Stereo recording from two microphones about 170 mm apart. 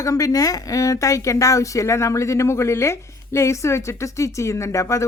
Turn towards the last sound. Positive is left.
turn(degrees=15)  # may be behind; listen again after turning